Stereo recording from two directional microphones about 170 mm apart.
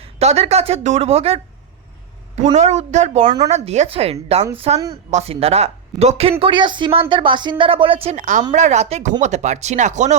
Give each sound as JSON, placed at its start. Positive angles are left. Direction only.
{"t": 0.0, "sound": "speech", "side_deg": -40}
{"t": 2.6, "sound": "speech", "side_deg": -40}
{"t": 3.2, "sound": "speech", "side_deg": -25}
{"t": 3.5, "sound": "speech", "side_deg": -40}
{"t": 8.1, "sound": "speech", "side_deg": -50}